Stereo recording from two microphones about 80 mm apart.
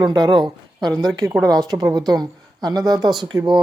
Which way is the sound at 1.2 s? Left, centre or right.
Centre.